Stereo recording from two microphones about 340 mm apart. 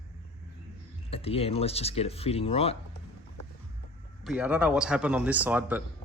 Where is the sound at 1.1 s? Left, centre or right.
Centre.